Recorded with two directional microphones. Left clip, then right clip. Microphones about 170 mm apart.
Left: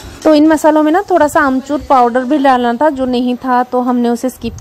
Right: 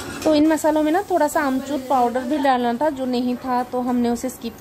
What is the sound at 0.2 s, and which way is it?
A woman's voice, 40° left (ahead or behind).